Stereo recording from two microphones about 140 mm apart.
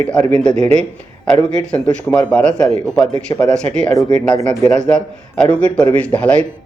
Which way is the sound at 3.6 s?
5° left (ahead or behind).